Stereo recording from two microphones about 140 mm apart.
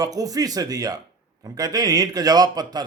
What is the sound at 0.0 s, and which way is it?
A man's voice, 25° right (ahead or behind).